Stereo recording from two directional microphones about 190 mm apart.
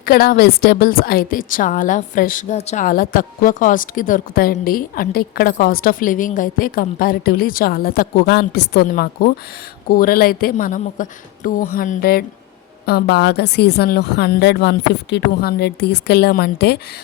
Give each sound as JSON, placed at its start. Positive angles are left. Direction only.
{"t": 0.0, "sound": "a woman's voice", "side_deg": 50}